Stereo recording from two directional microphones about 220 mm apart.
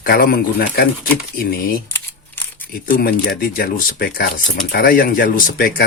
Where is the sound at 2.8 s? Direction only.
45° left (ahead or behind).